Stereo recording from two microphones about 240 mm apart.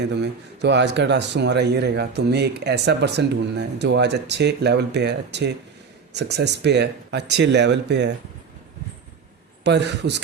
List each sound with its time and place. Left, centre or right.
0.0 s speech: right
9.6 s speech: right